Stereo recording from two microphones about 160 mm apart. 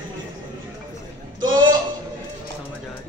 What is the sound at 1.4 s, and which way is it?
Speech, 25° right (ahead or behind).